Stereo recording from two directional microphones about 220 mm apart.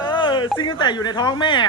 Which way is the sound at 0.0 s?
20° left (ahead or behind).